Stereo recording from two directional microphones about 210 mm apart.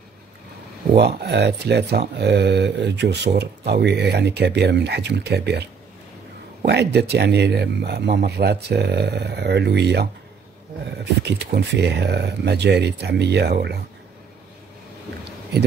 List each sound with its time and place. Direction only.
0.9 s speech: 50° right (ahead or behind)